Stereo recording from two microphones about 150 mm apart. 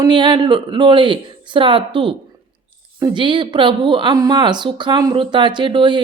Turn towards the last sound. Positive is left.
turn(degrees=-30)  # may be behind; listen again after turning